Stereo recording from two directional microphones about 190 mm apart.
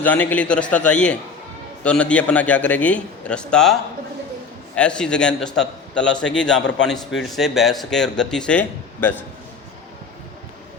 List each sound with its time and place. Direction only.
0.0 s a man's voice: 10° left (ahead or behind)